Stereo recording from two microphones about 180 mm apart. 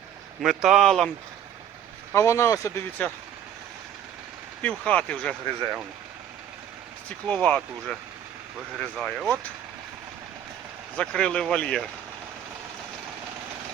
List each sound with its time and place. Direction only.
0.4 s speech: centre (ahead or behind)
2.1 s speech: 15° left (ahead or behind)
4.6 s speech: 5° left (ahead or behind)
5.5 s speech: 20° right (ahead or behind)
7.3 s speech: 5° left (ahead or behind)
10.9 s speech: 5° left (ahead or behind)